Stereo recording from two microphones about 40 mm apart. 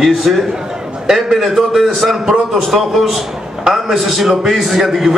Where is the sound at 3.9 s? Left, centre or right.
Centre.